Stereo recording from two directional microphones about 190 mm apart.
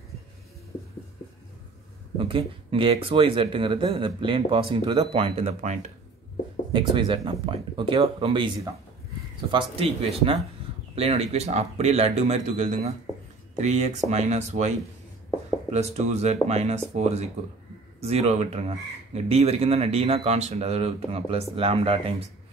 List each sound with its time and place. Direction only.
2.1 s speech: 25° right (ahead or behind)
6.7 s speech: 25° right (ahead or behind)
15.7 s speech: 35° right (ahead or behind)